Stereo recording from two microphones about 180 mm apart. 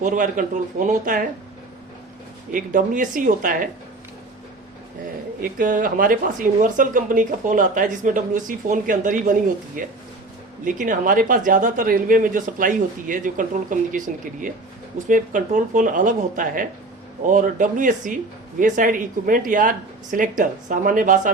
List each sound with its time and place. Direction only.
0.0 s speech: 45° right (ahead or behind)
2.5 s speech: 45° right (ahead or behind)
5.4 s speech: 50° right (ahead or behind)